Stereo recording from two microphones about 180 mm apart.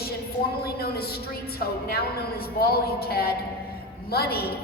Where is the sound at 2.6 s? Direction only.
60° left (ahead or behind).